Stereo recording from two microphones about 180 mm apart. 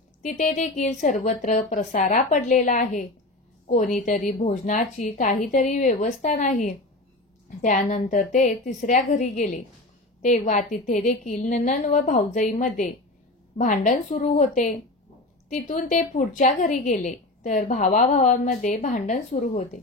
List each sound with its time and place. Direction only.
0.2 s a woman's voice: 40° left (ahead or behind)